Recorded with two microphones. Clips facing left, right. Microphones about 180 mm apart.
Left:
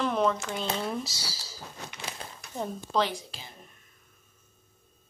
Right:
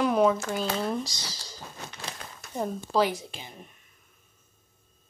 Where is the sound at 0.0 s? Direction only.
10° right (ahead or behind).